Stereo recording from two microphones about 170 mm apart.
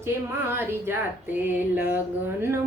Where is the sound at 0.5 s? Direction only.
10° right (ahead or behind).